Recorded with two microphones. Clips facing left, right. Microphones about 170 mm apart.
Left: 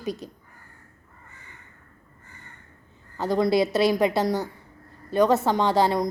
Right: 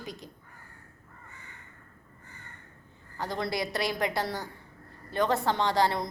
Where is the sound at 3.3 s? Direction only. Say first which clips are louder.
Left 11 dB; 20° left (ahead or behind).